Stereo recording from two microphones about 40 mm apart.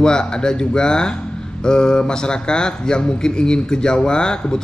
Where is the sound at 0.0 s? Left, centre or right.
Centre.